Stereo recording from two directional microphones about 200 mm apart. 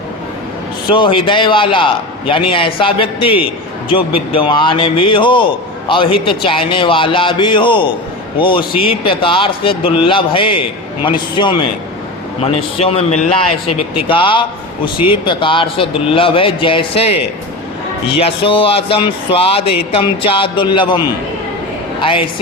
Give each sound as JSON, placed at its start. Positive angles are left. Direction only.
{"t": 0.9, "sound": "speech", "side_deg": 25}
{"t": 18.2, "sound": "speech", "side_deg": 25}